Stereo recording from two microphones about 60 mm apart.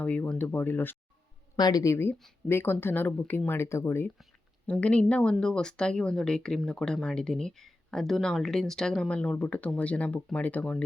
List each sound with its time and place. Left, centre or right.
0.0 s speech: left
1.7 s speech: left
2.5 s speech: left
4.6 s speech: left